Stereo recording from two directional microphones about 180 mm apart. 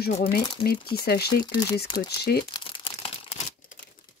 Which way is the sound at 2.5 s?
25° left (ahead or behind).